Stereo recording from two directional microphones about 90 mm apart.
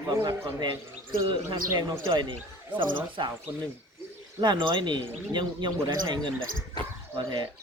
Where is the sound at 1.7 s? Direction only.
60° right (ahead or behind).